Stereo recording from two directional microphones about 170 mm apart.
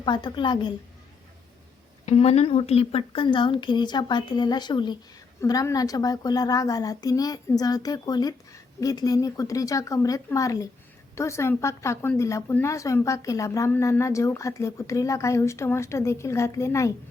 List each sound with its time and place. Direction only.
0.0 s a woman's voice: 25° left (ahead or behind)
2.0 s a woman's voice: 40° left (ahead or behind); by 16.9 s 15° left (ahead or behind)